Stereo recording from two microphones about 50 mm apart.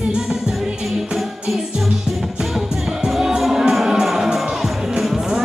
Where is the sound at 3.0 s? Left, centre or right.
Centre.